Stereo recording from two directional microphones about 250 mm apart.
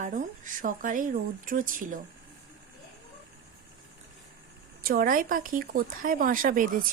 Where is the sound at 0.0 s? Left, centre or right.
Right.